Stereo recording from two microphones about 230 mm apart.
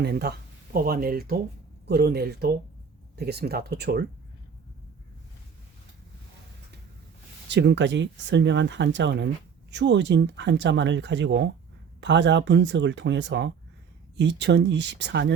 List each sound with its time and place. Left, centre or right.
0.0 s speech: right
7.4 s speech: right